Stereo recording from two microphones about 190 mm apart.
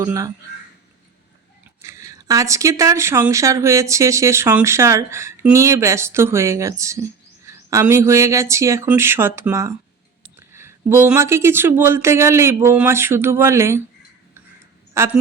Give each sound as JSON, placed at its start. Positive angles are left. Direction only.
{"t": 0.0, "sound": "speech", "side_deg": -15}
{"t": 1.8, "sound": "speech", "side_deg": -15}
{"t": 14.9, "sound": "a woman's voice", "side_deg": -10}